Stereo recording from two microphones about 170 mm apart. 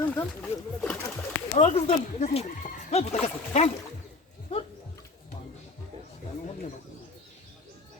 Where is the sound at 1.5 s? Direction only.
40° left (ahead or behind).